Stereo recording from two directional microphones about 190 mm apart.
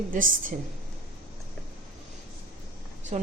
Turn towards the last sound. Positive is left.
turn(degrees=-35)  # may be behind; listen again after turning